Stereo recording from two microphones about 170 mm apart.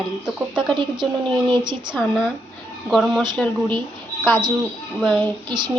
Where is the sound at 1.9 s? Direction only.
Centre (ahead or behind).